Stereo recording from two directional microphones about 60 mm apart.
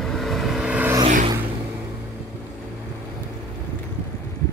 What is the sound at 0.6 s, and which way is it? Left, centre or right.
Vehicle, right.